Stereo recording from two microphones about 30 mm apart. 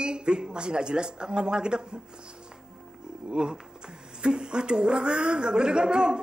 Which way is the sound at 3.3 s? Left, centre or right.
Right.